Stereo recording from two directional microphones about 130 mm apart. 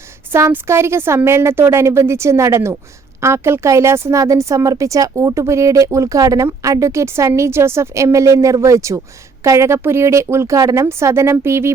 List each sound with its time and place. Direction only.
0.3 s a woman's voice: 20° right (ahead or behind)